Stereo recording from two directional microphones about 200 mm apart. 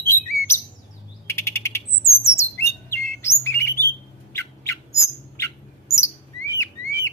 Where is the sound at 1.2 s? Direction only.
10° left (ahead or behind).